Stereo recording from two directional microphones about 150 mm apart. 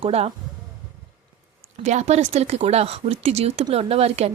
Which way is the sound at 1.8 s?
50° right (ahead or behind).